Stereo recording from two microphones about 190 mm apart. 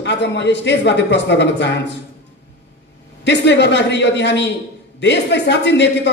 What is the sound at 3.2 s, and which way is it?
A man's voice, 65° left (ahead or behind).